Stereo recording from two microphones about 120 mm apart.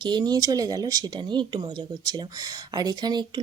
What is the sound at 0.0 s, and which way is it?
Speech, 35° right (ahead or behind).